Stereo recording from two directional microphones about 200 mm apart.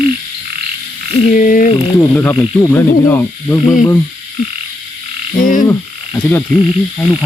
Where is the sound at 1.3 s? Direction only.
40° left (ahead or behind).